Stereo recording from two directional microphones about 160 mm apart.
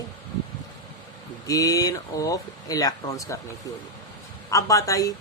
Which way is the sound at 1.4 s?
20° left (ahead or behind).